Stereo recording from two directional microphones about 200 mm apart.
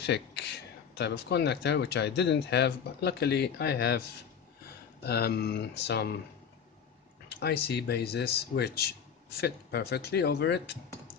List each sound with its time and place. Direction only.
0.0 s speech: 55° left (ahead or behind)
5.0 s speech: 55° left (ahead or behind)
7.2 s speech: 55° left (ahead or behind)